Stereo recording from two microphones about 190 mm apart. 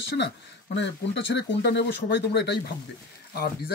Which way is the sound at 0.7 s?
65° left (ahead or behind).